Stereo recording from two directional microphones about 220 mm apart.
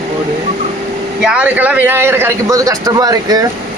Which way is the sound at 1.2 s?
5° right (ahead or behind).